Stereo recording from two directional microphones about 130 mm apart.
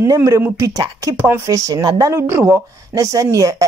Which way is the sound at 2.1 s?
15° right (ahead or behind).